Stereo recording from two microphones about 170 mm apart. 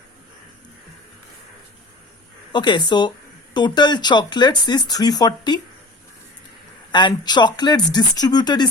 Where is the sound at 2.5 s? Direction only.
25° left (ahead or behind).